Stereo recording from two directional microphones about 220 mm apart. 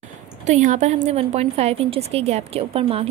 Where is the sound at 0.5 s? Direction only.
35° right (ahead or behind).